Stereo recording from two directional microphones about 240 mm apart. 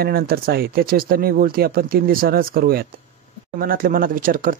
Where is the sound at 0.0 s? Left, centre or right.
Right.